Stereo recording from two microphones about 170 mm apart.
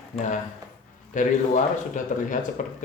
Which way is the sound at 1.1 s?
50° left (ahead or behind).